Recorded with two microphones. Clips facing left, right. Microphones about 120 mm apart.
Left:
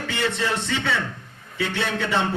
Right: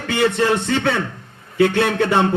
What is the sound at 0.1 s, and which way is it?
A man's voice, 55° right (ahead or behind).